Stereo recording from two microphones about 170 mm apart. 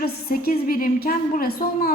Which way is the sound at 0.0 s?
60° left (ahead or behind).